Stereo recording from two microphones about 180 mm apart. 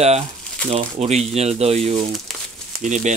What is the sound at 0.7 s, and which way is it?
Speech, 35° right (ahead or behind).